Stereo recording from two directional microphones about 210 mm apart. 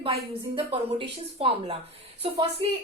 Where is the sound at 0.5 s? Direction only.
25° right (ahead or behind).